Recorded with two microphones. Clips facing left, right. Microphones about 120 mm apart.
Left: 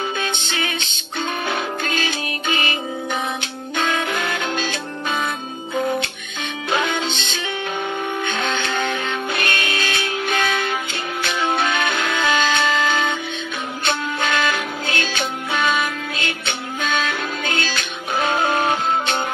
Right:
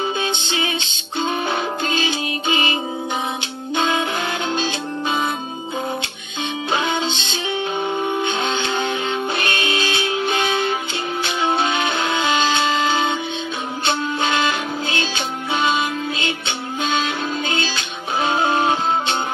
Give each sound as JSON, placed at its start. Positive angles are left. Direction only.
{"t": 0.2, "sound": "music", "side_deg": -20}
{"t": 7.8, "sound": "music", "side_deg": -20}